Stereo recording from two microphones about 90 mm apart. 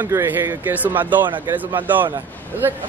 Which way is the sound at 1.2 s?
60° right (ahead or behind).